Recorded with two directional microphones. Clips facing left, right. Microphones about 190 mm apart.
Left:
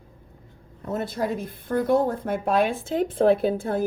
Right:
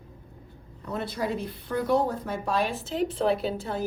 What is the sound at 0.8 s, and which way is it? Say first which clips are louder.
Speech: left 3 dB; 45° left (ahead or behind).